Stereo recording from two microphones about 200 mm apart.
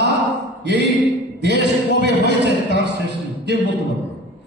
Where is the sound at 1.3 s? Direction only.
55° right (ahead or behind).